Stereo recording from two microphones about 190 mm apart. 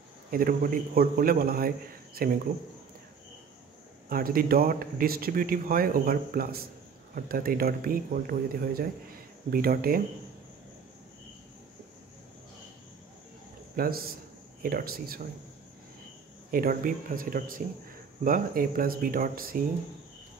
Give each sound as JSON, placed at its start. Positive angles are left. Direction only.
{"t": 0.3, "sound": "speech", "side_deg": -50}
{"t": 4.1, "sound": "speech", "side_deg": -50}
{"t": 13.7, "sound": "speech", "side_deg": -50}
{"t": 16.4, "sound": "speech", "side_deg": -50}